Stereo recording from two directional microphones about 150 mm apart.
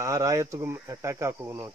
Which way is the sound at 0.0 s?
20° right (ahead or behind).